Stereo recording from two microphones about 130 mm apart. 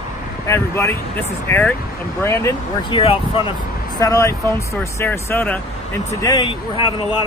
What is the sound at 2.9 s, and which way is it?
Speech, 45° left (ahead or behind).